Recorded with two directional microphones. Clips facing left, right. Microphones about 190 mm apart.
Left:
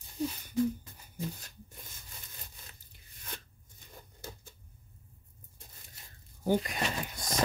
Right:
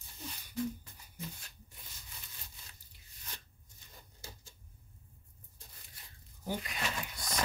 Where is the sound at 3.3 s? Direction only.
55° left (ahead or behind).